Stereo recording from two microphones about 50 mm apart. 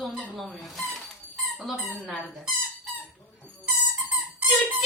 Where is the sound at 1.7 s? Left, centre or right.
Centre.